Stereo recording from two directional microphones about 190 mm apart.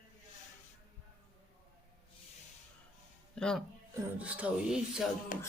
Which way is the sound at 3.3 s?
5° left (ahead or behind).